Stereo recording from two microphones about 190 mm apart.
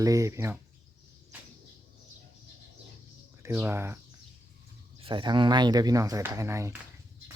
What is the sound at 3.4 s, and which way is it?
Speech, 10° right (ahead or behind).